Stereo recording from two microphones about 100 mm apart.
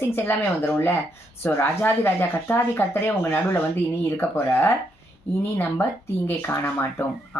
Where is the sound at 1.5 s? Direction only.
20° left (ahead or behind).